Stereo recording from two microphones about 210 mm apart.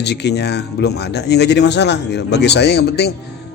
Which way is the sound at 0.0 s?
55° left (ahead or behind).